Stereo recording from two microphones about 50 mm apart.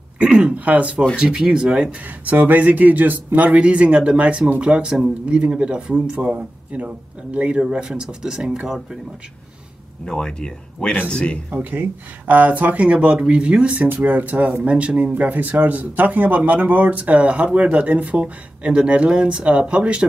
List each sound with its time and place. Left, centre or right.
0.2 s speech: centre
1.1 s speech: centre
2.2 s speech: right
3.4 s speech: right
10.0 s speech: centre
11.5 s speech: right
14.0 s speech: right
15.1 s speech: right